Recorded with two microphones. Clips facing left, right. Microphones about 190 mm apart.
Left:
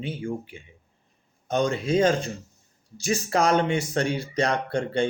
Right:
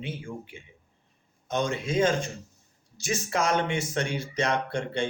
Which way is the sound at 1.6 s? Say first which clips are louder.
Left 4 dB; 35° left (ahead or behind).